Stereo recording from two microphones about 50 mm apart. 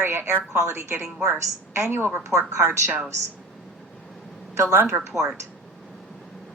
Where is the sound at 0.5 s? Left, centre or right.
Right.